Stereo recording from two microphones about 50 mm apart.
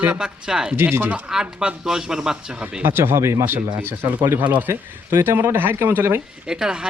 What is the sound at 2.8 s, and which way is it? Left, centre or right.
Speech, right.